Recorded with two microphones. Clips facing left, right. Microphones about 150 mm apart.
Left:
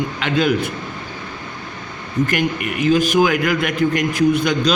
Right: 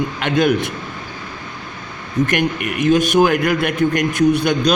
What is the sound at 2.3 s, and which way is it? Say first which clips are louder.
Speech: right 1 dB; 55° right (ahead or behind).